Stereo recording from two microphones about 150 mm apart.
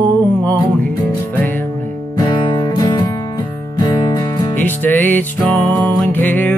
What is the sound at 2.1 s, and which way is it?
Music, 30° left (ahead or behind).